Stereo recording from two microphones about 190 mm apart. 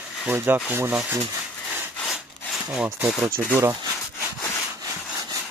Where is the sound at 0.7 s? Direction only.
10° right (ahead or behind).